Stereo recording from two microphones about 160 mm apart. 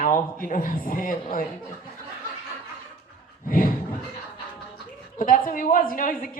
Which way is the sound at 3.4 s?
60° left (ahead or behind).